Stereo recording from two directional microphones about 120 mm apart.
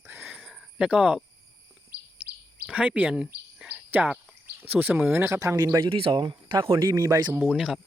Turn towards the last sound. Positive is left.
turn(degrees=-5)  # may be behind; listen again after turning